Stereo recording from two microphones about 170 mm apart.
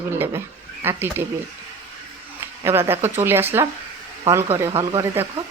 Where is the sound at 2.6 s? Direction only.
15° right (ahead or behind).